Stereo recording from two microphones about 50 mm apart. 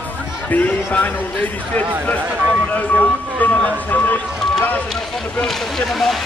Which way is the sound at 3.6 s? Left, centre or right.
Left.